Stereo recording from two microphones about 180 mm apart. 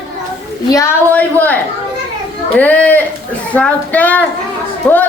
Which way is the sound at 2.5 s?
10° left (ahead or behind).